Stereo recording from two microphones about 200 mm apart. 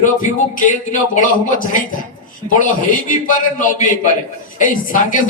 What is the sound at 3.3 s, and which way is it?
A man's voice, 40° left (ahead or behind).